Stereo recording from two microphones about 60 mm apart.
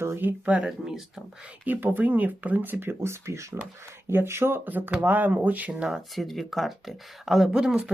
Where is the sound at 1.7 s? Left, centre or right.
Right.